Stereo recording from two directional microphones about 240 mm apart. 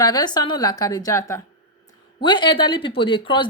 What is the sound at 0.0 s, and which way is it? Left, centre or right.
Speech, centre.